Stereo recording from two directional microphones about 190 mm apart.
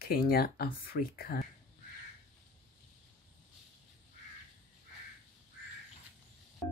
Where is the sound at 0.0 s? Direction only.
50° left (ahead or behind).